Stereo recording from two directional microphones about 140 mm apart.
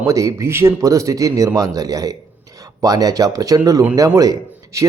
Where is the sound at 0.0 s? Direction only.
25° right (ahead or behind).